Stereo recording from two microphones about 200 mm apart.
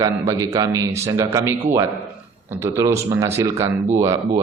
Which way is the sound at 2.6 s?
15° right (ahead or behind).